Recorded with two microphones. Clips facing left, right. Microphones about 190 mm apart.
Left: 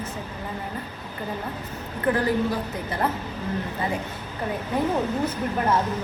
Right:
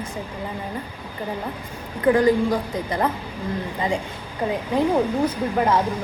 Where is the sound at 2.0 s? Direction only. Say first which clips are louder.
Right 6 dB; 15° right (ahead or behind).